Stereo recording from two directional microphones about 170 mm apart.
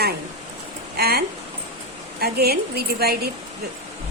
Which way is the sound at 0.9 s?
65° right (ahead or behind).